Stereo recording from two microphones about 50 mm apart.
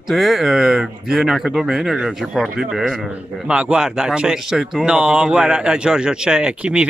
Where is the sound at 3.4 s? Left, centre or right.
Centre.